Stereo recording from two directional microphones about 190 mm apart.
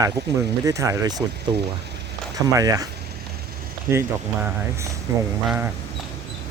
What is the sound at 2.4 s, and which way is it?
Speech, 20° right (ahead or behind).